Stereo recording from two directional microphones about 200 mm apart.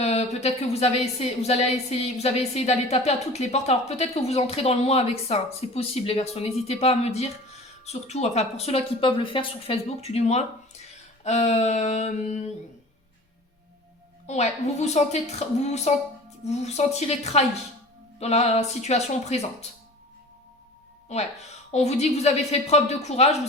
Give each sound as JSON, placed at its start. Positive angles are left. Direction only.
{"t": 0.0, "sound": "a woman's voice", "side_deg": 35}
{"t": 14.3, "sound": "a woman's voice", "side_deg": 35}
{"t": 21.1, "sound": "a woman's voice", "side_deg": 35}